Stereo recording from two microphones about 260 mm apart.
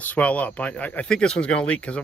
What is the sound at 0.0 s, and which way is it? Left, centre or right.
Speech, centre.